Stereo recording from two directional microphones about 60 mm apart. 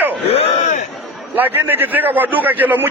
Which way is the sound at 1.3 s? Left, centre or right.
Right.